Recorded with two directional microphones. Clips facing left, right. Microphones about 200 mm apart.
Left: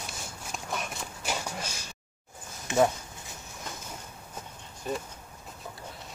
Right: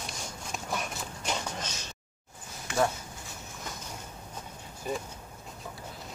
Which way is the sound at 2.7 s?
20° left (ahead or behind).